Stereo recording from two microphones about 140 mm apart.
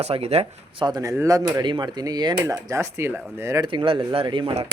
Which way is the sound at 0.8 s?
30° right (ahead or behind).